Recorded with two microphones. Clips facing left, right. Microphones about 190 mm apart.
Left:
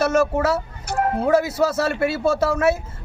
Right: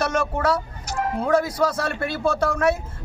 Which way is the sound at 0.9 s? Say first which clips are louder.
Left 4 dB; 55° left (ahead or behind).